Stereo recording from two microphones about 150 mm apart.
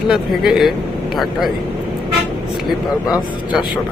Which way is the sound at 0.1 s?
Centre (ahead or behind).